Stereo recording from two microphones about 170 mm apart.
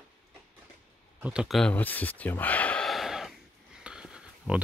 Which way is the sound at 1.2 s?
5° right (ahead or behind).